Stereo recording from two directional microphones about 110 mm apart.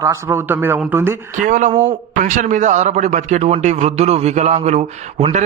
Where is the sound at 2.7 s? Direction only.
90° right.